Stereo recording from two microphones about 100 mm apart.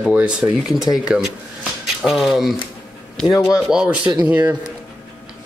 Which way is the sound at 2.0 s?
5° right (ahead or behind).